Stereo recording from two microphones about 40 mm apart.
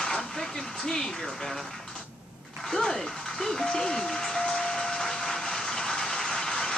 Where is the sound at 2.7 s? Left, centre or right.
Centre.